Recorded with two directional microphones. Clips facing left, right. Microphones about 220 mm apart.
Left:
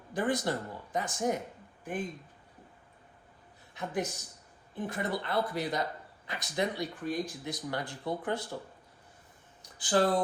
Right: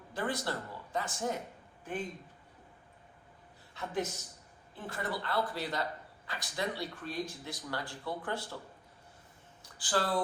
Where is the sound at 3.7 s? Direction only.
15° left (ahead or behind).